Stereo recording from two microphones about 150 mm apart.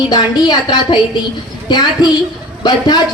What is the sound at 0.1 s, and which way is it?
Speech, 25° left (ahead or behind).